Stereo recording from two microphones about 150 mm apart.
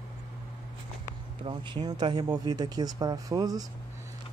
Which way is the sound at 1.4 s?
30° right (ahead or behind).